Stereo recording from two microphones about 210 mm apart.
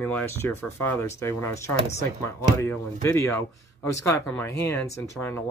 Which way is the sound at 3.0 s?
15° left (ahead or behind).